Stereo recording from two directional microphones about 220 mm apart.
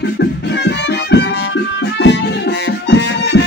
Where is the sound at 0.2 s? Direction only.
50° left (ahead or behind).